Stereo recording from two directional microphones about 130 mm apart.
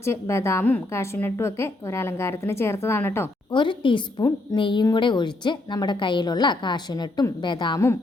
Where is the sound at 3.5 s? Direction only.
40° left (ahead or behind).